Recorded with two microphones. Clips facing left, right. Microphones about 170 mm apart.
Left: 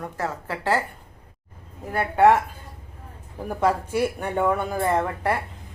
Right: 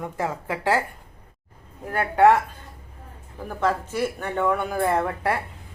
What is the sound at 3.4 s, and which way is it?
Speech, 10° left (ahead or behind).